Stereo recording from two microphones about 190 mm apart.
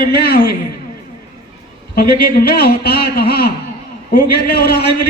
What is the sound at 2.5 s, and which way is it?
A man's voice, 55° left (ahead or behind).